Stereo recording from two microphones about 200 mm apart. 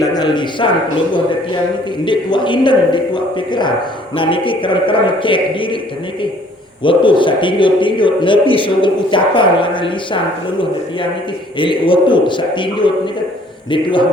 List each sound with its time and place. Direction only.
0.0 s a man's voice: 20° left (ahead or behind)
6.8 s a man's voice: 25° left (ahead or behind)
11.5 s a man's voice: 25° left (ahead or behind)